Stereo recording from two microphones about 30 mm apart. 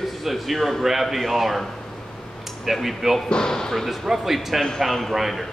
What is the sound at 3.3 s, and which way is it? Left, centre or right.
Speech, left.